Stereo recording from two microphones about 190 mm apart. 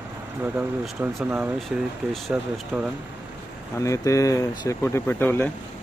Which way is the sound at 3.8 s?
15° left (ahead or behind).